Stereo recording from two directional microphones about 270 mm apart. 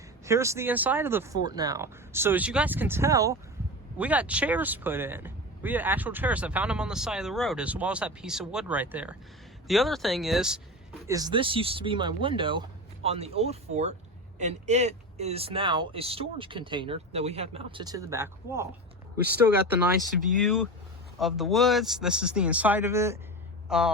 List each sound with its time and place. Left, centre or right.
0.3 s speech: centre
11.0 s speech: centre
20.0 s speech: centre